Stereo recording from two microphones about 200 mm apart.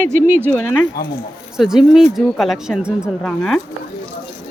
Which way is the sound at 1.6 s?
Centre (ahead or behind).